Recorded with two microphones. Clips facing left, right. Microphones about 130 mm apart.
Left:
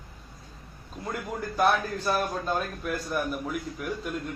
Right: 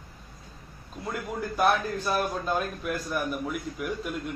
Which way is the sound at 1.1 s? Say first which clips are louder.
Right 1 dB; centre (ahead or behind).